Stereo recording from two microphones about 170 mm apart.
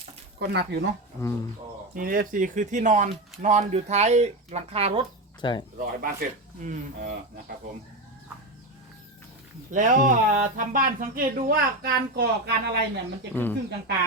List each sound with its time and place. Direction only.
0.0 s a sound: 80° right
1.2 s speech: 15° left (ahead or behind)
2.0 s speech: 55° right (ahead or behind); by 5.0 s 35° right (ahead or behind)
5.4 s speech: 30° left (ahead or behind)
5.8 s speech: 55° right (ahead or behind)
9.7 s speech: 50° right (ahead or behind); by 12.8 s 75° right (ahead or behind)
13.3 s speech: 10° left (ahead or behind)